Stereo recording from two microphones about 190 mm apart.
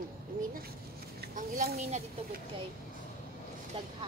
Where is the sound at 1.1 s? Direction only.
50° right (ahead or behind).